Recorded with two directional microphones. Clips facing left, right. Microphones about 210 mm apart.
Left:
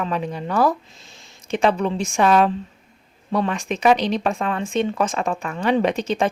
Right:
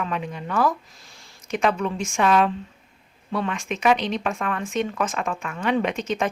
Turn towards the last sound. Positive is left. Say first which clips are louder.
# left 4 dB
turn(degrees=30)  # may be behind; listen again after turning